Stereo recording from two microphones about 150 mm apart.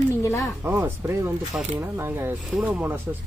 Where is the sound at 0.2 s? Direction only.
20° left (ahead or behind).